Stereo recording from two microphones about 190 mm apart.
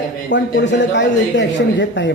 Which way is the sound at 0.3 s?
70° left (ahead or behind).